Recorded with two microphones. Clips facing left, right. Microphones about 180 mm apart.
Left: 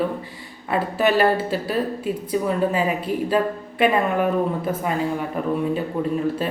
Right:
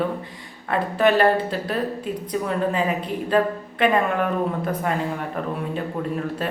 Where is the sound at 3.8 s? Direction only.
10° left (ahead or behind).